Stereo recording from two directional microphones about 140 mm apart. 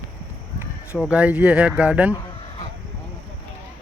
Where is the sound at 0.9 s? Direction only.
5° right (ahead or behind).